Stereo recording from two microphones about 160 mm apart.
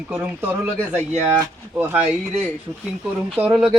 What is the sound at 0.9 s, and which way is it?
Speech, 45° right (ahead or behind).